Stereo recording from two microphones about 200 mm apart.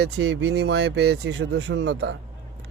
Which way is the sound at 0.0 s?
60° right (ahead or behind).